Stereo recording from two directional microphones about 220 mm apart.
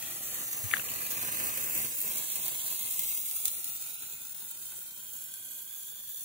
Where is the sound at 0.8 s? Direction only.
30° right (ahead or behind).